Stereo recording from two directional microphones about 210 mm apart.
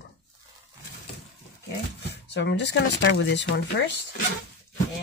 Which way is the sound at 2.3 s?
55° left (ahead or behind).